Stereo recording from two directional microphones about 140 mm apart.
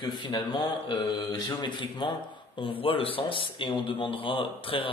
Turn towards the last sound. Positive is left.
turn(degrees=40)  # may be behind; listen again after turning